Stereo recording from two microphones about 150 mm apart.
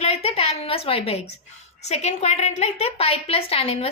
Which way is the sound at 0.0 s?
45° left (ahead or behind).